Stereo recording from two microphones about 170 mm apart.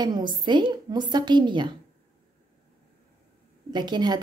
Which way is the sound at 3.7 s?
25° right (ahead or behind).